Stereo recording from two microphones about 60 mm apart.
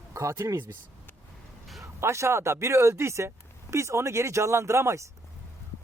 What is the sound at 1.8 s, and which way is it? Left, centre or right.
Speech, right.